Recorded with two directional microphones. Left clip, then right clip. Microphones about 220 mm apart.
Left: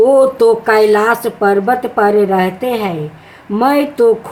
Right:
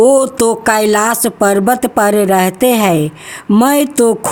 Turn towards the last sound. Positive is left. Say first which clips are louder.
# even
turn(degrees=-50)  # may be behind; listen again after turning